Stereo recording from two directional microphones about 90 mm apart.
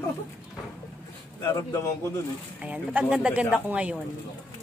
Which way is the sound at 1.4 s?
35° left (ahead or behind).